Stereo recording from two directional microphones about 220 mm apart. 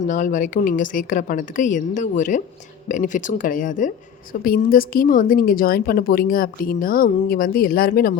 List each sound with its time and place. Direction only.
0.0 s a woman's voice: 35° left (ahead or behind)